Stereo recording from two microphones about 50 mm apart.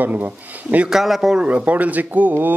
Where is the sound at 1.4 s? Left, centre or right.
Right.